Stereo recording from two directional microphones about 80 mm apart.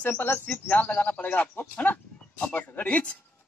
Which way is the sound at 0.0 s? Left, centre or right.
Left.